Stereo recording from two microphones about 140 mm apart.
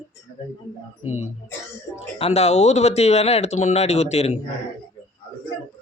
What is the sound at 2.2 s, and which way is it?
Speech, 50° left (ahead or behind).